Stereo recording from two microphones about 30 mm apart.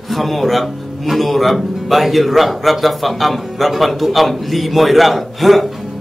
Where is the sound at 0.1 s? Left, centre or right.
Centre.